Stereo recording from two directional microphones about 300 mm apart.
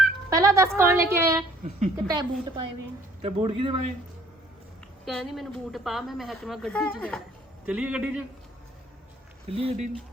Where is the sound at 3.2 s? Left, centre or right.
Centre.